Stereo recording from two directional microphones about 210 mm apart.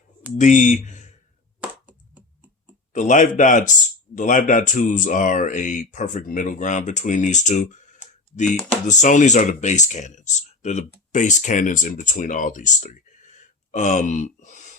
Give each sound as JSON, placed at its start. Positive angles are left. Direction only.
{"t": 0.3, "sound": "speech", "side_deg": 35}
{"t": 1.6, "sound": "computer keyboard", "side_deg": -5}
{"t": 2.9, "sound": "speech", "side_deg": 35}